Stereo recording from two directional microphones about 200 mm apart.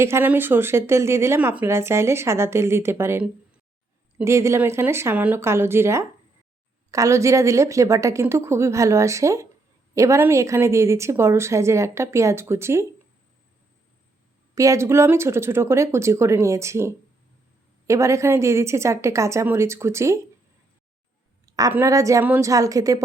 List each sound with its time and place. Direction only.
0.0 s speech: 10° right (ahead or behind)
14.5 s speech: 15° right (ahead or behind)
21.4 s speech: 15° right (ahead or behind)